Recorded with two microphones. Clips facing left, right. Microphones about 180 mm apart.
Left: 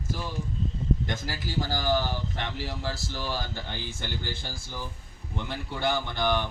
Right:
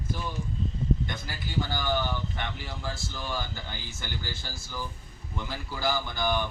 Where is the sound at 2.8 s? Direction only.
75° left (ahead or behind).